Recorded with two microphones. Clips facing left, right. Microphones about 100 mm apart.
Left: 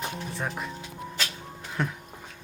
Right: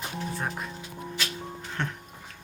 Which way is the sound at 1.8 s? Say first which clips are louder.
Left 3 dB; 5° left (ahead or behind).